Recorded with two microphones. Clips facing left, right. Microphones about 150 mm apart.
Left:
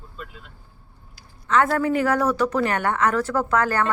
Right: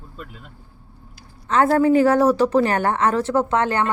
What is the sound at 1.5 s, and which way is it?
A woman's voice, 30° right (ahead or behind).